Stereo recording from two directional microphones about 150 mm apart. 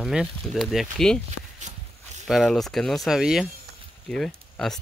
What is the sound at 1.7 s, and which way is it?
Walk, 50° right (ahead or behind).